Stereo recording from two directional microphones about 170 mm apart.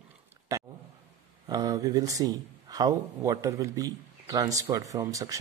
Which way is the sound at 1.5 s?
20° right (ahead or behind).